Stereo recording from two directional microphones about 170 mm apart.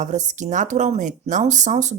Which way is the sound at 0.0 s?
45° right (ahead or behind).